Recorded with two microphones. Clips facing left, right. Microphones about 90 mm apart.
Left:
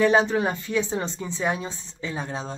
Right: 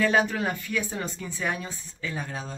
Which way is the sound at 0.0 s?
25° left (ahead or behind).